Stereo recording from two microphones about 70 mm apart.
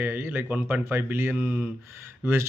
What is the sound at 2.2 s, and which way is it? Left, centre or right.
Speech, right.